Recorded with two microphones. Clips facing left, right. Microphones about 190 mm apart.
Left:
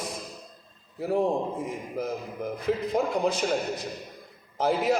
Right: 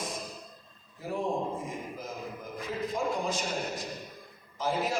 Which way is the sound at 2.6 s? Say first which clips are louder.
Left 6 dB; 65° left (ahead or behind).